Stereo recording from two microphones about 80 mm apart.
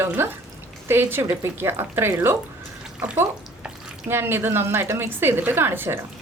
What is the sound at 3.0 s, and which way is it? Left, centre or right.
Bathtub, centre.